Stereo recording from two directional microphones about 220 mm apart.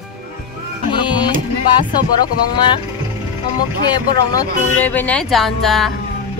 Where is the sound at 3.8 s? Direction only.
15° left (ahead or behind).